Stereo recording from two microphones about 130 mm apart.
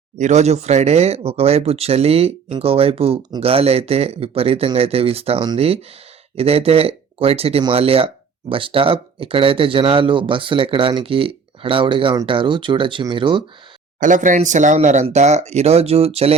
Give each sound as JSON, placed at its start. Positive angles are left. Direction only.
{"t": 0.2, "sound": "speech", "side_deg": -60}
{"t": 14.0, "sound": "speech", "side_deg": -80}